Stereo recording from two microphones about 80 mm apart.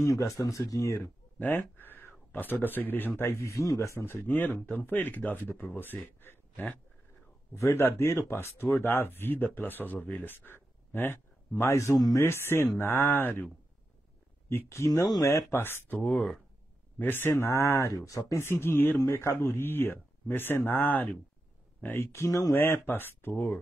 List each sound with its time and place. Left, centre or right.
0.0 s speech: left
1.4 s speech: left
7.5 s speech: left
11.5 s speech: left
12.7 s speech: left
14.7 s speech: left
22.5 s speech: left